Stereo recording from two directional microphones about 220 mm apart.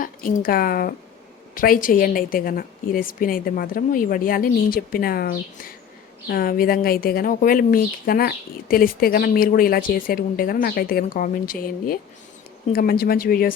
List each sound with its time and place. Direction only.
0.0 s a woman's voice: 40° left (ahead or behind)